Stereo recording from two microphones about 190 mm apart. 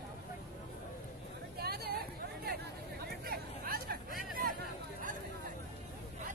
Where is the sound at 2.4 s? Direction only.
55° right (ahead or behind).